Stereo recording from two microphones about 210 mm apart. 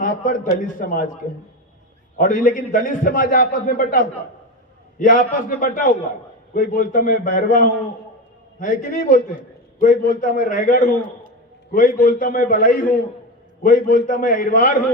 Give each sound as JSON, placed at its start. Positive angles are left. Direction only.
{"t": 0.0, "sound": "a man's voice", "side_deg": 40}